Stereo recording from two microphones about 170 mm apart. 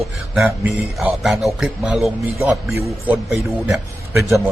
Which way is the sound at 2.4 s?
15° right (ahead or behind).